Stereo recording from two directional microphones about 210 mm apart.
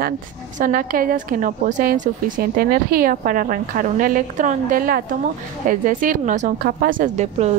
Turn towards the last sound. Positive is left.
turn(degrees=-35)  # may be behind; listen again after turning